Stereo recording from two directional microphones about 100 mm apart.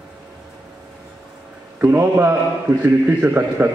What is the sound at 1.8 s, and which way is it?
A man's voice, 20° right (ahead or behind).